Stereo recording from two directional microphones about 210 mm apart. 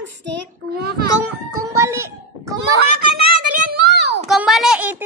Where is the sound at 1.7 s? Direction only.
15° right (ahead or behind).